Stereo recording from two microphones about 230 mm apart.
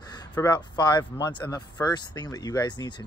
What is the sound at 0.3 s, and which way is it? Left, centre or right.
Speech, centre.